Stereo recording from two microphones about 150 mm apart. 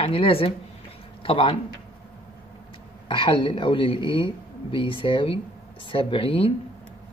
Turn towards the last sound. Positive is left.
turn(degrees=35)  # may be behind; listen again after turning